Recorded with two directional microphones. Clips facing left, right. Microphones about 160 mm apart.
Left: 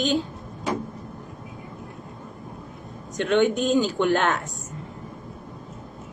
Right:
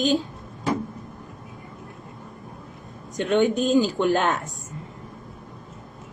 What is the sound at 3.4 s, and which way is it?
Speech, 35° right (ahead or behind).